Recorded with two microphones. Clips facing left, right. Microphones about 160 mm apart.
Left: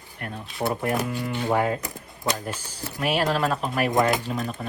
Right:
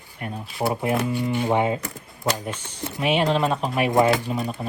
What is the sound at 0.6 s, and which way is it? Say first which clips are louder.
Speech: right 2 dB; 25° right (ahead or behind).